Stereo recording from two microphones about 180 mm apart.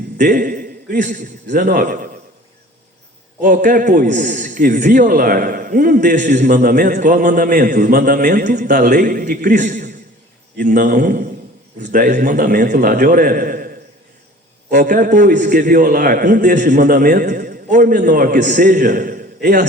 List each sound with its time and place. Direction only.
0.2 s a man's voice: 50° right (ahead or behind)
3.4 s a man's voice: 50° right (ahead or behind)
14.7 s a man's voice: 50° right (ahead or behind)